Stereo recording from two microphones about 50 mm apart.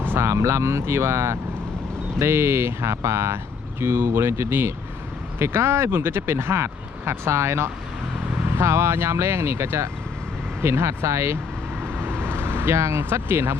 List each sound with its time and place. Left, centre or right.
0.1 s speech: right
12.1 s vehicle: left
12.4 s speech: right